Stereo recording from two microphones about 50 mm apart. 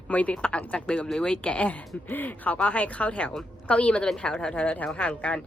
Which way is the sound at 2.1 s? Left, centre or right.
Left.